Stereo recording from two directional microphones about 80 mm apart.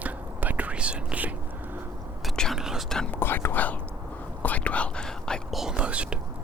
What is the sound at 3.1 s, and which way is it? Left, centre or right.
Whispering, left.